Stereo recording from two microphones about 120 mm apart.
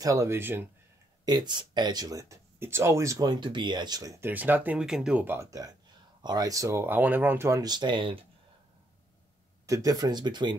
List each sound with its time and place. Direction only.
0.0 s speech: 25° right (ahead or behind)
1.2 s speech: 35° right (ahead or behind)
4.2 s speech: 15° right (ahead or behind)
7.6 s speech: 40° right (ahead or behind)
9.7 s speech: 30° right (ahead or behind)